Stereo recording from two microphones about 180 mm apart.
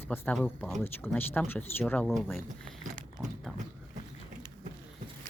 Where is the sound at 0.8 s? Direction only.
10° left (ahead or behind).